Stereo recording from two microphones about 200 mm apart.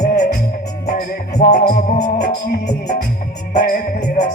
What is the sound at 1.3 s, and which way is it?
Music, 50° left (ahead or behind).